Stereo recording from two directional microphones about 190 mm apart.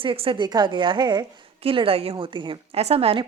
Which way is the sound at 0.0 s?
30° right (ahead or behind).